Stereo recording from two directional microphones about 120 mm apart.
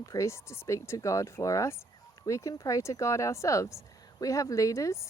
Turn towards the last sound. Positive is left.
turn(degrees=25)  # may be behind; listen again after turning